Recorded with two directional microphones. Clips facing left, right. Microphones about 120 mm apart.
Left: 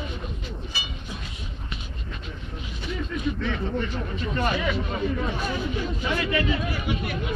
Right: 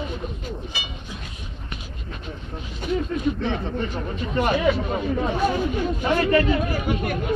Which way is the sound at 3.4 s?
30° right (ahead or behind).